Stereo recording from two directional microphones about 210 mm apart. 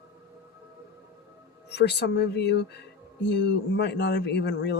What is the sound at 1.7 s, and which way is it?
Speech, 55° left (ahead or behind).